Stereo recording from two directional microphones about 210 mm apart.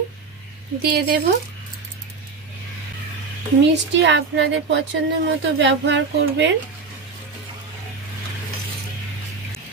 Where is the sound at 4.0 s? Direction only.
55° right (ahead or behind).